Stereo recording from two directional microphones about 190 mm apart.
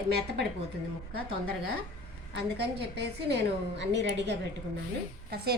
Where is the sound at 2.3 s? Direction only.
60° right (ahead or behind).